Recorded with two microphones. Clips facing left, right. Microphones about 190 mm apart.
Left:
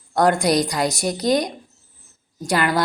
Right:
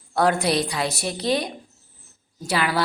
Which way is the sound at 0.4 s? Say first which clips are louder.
Left 4 dB; 15° left (ahead or behind).